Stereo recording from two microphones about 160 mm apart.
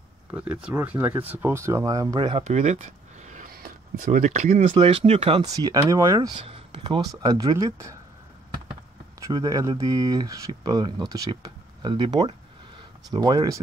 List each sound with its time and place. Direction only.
0.3 s speech: 5° right (ahead or behind); by 2.4 s 30° right (ahead or behind)
2.4 s a sound: 45° right (ahead or behind)
4.7 s speech: 35° right (ahead or behind)
5.4 s speech: 25° right (ahead or behind)
6.4 s speech: 35° right (ahead or behind); by 7.9 s 20° right (ahead or behind)
9.2 s speech: 25° right (ahead or behind)